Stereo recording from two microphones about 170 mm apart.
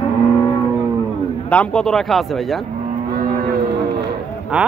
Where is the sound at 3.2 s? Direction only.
60° right (ahead or behind).